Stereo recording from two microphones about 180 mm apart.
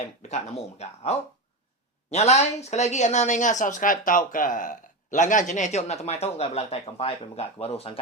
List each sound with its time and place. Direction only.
0.2 s speech: 40° left (ahead or behind)